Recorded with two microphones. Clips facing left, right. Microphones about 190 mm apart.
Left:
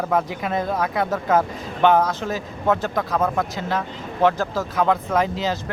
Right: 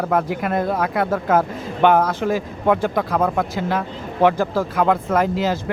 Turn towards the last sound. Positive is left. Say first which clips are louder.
# right 3 dB
turn(degrees=-10)  # may be behind; listen again after turning